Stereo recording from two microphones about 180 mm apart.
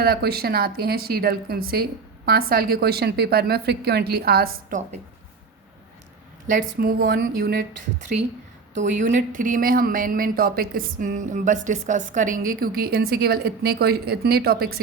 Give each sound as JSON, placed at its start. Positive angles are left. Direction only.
{"t": 0.0, "sound": "a woman's voice", "side_deg": -60}
{"t": 6.5, "sound": "a woman's voice", "side_deg": -50}
{"t": 8.8, "sound": "speech", "side_deg": -45}